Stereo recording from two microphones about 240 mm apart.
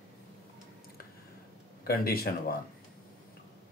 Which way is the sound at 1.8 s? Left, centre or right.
Left.